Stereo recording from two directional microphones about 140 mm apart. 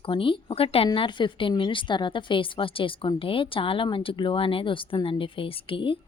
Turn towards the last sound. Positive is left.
turn(degrees=40)  # may be behind; listen again after turning